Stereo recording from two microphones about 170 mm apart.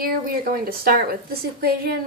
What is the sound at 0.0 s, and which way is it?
A woman's voice, 60° right (ahead or behind).